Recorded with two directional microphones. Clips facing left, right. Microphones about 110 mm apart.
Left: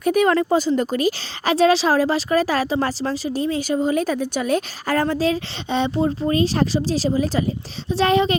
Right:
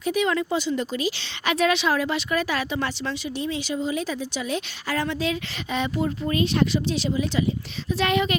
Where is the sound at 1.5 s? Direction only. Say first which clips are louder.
Left 5 dB; 30° left (ahead or behind).